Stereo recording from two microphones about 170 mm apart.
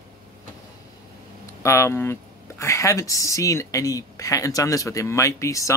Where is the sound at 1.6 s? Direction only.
15° left (ahead or behind).